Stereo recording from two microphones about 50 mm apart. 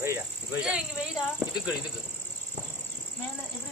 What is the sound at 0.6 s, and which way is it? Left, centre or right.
Speech, centre.